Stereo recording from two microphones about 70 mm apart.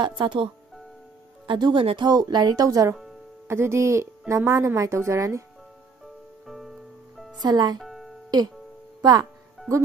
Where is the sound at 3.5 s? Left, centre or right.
Right.